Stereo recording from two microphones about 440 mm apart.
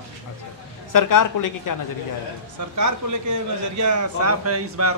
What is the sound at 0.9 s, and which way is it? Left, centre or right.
Speech, left.